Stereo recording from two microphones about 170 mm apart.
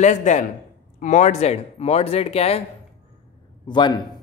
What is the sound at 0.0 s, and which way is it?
A man's voice, 45° left (ahead or behind).